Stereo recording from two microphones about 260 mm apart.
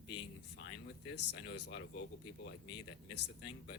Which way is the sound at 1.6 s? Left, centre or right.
Left.